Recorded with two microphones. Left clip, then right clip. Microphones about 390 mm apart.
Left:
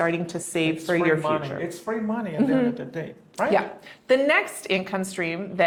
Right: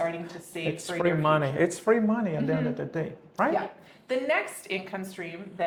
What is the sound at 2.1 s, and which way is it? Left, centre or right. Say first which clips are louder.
Speech: left 3 dB; right.